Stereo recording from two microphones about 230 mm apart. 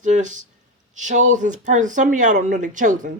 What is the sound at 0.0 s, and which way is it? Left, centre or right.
Speech, right.